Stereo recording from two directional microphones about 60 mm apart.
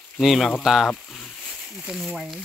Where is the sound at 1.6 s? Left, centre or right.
Centre.